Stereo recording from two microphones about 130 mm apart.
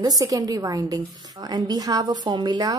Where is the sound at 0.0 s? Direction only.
30° right (ahead or behind).